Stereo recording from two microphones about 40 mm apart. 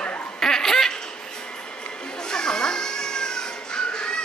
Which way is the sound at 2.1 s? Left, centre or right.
Centre.